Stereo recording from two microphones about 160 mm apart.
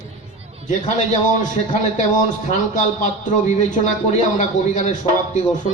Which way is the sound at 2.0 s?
50° left (ahead or behind).